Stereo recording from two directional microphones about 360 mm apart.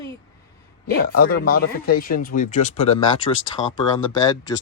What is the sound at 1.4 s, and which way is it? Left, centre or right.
Speech, left.